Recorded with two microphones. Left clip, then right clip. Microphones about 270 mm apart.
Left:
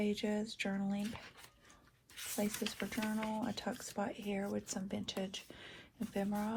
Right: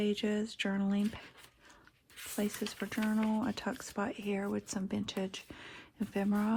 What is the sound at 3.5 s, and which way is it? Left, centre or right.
Speech, right.